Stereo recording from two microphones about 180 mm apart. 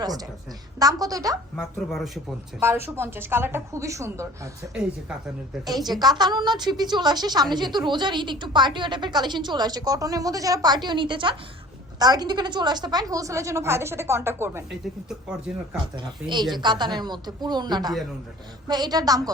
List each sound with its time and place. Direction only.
0.0 s a woman's voice: 20° right (ahead or behind)
1.5 s speech: centre (ahead or behind)
2.6 s a woman's voice: 15° right (ahead or behind)
5.6 s a woman's voice: 20° right (ahead or behind)
16.3 s a woman's voice: 25° right (ahead or behind)